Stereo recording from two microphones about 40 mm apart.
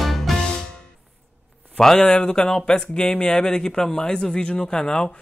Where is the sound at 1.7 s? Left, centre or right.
Centre.